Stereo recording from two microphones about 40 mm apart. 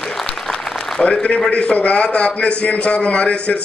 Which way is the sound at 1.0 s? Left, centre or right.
Left.